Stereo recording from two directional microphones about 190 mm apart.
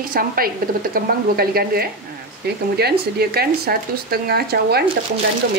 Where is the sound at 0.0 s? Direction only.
50° right (ahead or behind).